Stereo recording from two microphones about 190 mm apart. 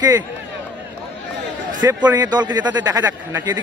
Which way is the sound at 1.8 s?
20° right (ahead or behind).